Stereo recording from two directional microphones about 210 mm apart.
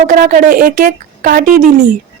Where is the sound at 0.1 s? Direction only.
40° right (ahead or behind).